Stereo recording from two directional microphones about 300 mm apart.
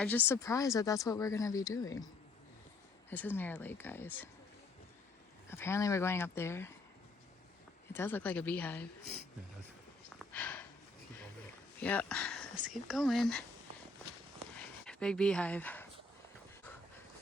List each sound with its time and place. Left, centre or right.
0.0 s speech: centre
3.1 s speech: centre
5.5 s speech: centre
7.9 s a woman's voice: centre
10.3 s sniff: centre
11.8 s a sound: centre
12.7 s a woman's voice: centre
14.5 s a sound: centre